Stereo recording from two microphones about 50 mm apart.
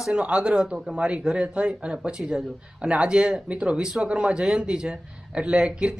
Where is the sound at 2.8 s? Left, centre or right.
Right.